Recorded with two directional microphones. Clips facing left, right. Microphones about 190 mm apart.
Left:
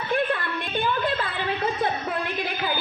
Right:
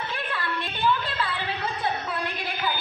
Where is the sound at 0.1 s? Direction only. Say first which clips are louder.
Left 7 dB; 50° left (ahead or behind).